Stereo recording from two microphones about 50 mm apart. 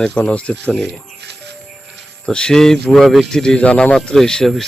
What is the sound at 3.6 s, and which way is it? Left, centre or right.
Speech, left.